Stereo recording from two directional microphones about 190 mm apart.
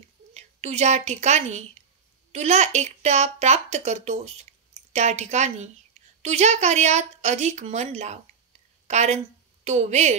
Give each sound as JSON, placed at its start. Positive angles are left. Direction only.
{"t": 0.3, "sound": "a woman's voice", "side_deg": -35}